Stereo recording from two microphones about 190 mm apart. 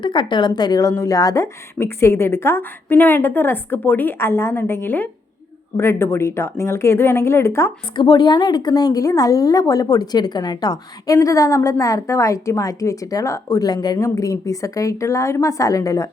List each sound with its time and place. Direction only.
0.0 s a woman's voice: 25° left (ahead or behind)